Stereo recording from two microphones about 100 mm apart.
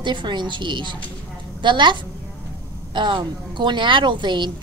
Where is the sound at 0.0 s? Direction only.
50° right (ahead or behind).